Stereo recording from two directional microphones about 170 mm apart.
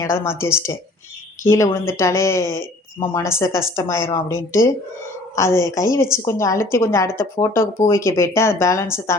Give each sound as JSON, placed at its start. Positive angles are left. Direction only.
{"t": 0.3, "sound": "a woman's voice", "side_deg": 15}